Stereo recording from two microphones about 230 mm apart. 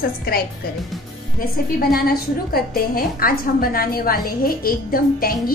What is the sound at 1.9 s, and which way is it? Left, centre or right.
A woman's voice, left.